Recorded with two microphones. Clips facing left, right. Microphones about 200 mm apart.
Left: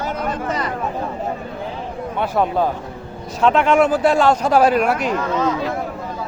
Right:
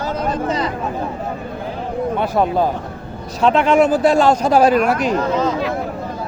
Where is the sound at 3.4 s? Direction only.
35° right (ahead or behind).